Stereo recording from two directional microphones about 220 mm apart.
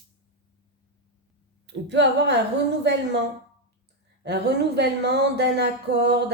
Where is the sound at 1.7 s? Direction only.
55° right (ahead or behind).